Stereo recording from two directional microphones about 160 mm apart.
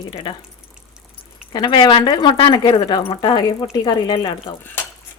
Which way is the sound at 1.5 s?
25° left (ahead or behind).